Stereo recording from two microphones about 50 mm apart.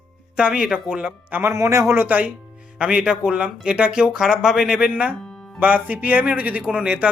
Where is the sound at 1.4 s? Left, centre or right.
Right.